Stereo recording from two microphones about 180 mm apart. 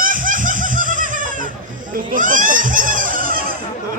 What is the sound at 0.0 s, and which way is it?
Snicker, 50° right (ahead or behind).